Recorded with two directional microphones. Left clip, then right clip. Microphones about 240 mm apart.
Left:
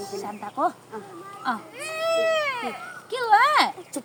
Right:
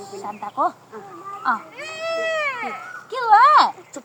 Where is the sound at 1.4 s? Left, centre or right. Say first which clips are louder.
Right 6 dB; left.